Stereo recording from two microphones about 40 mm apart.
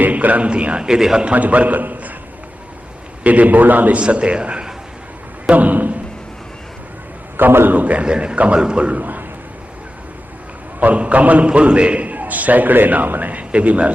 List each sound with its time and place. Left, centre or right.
0.0 s a man's voice: right
0.8 s a man's voice: centre
1.2 s a man's voice: right
3.2 s a man's voice: right
4.0 s a man's voice: right
5.5 s a man's voice: right
7.3 s a man's voice: right
7.7 s a man's voice: right
7.9 s a man's voice: right
9.0 s a man's voice: right
10.8 s a man's voice: right
11.4 s a man's voice: right
13.5 s a man's voice: right